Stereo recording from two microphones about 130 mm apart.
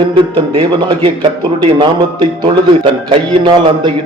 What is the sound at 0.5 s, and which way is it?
Speech, 40° right (ahead or behind).